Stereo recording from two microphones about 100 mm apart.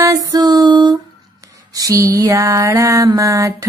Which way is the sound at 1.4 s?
35° right (ahead or behind).